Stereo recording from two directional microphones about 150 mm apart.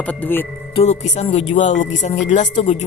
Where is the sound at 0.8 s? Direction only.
45° left (ahead or behind).